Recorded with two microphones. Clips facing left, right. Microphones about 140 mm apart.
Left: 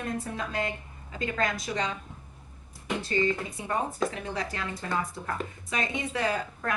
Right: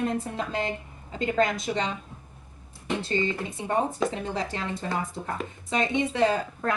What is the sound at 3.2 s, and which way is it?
Speech, 25° right (ahead or behind).